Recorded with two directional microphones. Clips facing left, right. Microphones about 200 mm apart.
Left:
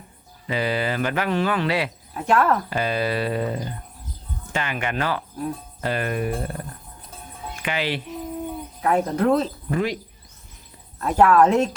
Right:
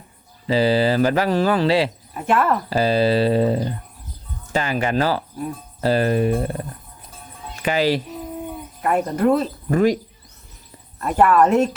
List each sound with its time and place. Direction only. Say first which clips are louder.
0.4 s speech: right 7 dB; 30° right (ahead or behind)
2.1 s speech: even; centre (ahead or behind)
2.6 s speech: right 6 dB; 35° right (ahead or behind)
7.6 s speech: right 7 dB; 40° right (ahead or behind)
8.8 s speech: right 2 dB; 5° right (ahead or behind)
9.6 s speech: right 7 dB; 45° right (ahead or behind)
11.0 s speech: even; 5° right (ahead or behind)